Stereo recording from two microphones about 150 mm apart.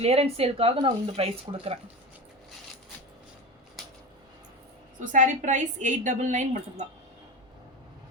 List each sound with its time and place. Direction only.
0.0 s speech: 45° right (ahead or behind)
3.8 s a sound: centre (ahead or behind)
4.9 s a woman's voice: 55° right (ahead or behind)